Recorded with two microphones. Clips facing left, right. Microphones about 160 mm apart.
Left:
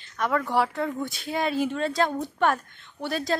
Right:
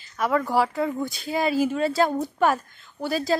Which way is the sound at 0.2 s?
5° right (ahead or behind).